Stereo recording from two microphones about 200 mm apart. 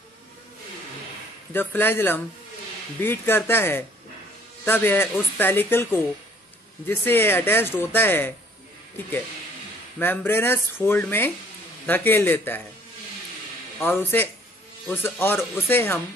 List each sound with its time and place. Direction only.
1.5 s speech: 10° left (ahead or behind)
9.9 s speech: 10° left (ahead or behind)
13.7 s speech: 10° left (ahead or behind)